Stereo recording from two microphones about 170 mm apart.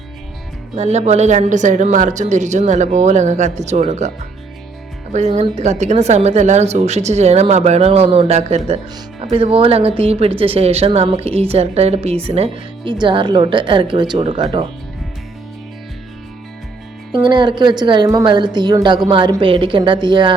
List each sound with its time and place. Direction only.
0.8 s speech: 40° right (ahead or behind)
5.1 s a woman's voice: 40° right (ahead or behind)
17.1 s a woman's voice: 30° right (ahead or behind)